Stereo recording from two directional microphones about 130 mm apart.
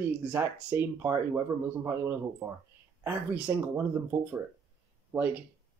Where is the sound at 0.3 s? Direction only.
15° right (ahead or behind).